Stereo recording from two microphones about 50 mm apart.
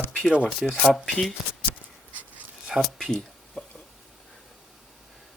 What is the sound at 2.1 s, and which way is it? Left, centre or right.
Dog, right.